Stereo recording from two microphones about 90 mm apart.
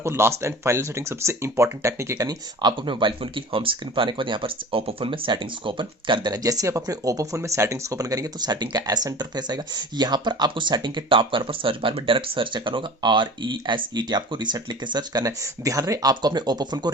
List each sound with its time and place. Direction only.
0.0 s speech: 30° right (ahead or behind)
2.1 s speech: 50° right (ahead or behind)